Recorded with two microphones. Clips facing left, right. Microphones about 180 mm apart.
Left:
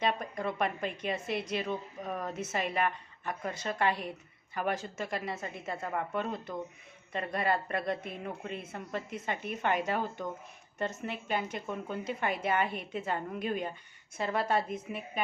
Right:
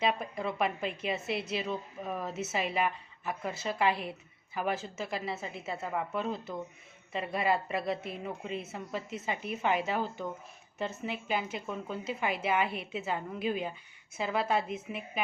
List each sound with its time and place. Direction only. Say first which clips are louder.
0.0 s a woman's voice: right 1 dB; 5° right (ahead or behind)
9.0 s speech: left 1 dB; 55° left (ahead or behind)
9.5 s speech: even; 5° right (ahead or behind)